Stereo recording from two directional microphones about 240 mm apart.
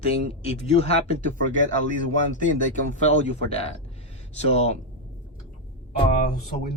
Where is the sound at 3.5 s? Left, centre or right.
Left.